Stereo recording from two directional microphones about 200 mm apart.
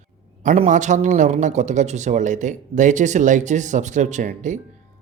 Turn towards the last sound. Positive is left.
turn(degrees=-40)  # may be behind; listen again after turning